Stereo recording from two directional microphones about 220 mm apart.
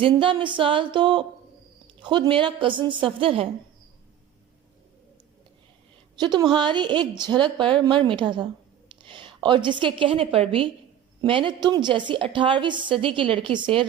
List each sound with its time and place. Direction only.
0.0 s a woman's voice: 25° right (ahead or behind)
6.1 s a woman's voice: 20° right (ahead or behind)